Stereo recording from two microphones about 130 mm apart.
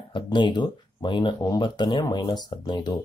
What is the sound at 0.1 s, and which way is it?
Speech, 35° left (ahead or behind).